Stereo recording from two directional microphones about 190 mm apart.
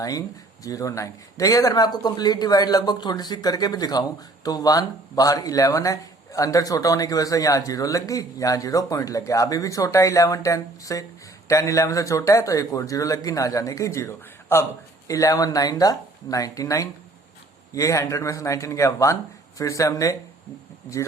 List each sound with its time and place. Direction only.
0.0 s speech: 20° left (ahead or behind)